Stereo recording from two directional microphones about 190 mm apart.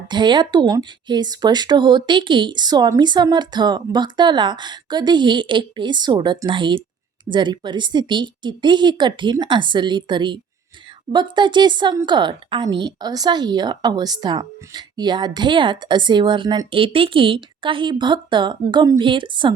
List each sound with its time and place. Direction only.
0.1 s a woman's voice: 25° right (ahead or behind)